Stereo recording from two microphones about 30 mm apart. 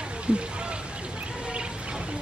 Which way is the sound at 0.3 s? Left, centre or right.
Right.